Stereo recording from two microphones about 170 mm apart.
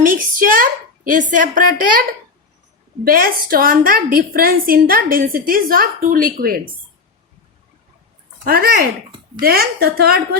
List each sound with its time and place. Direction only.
0.0 s a woman's voice: 55° right (ahead or behind)
8.4 s a woman's voice: 60° right (ahead or behind)